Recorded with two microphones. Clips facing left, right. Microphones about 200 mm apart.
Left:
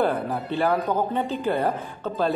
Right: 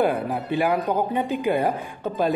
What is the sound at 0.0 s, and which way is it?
Speech, 15° right (ahead or behind).